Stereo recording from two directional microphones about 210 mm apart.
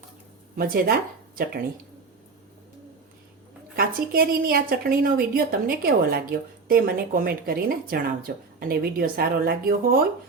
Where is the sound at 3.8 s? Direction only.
45° right (ahead or behind).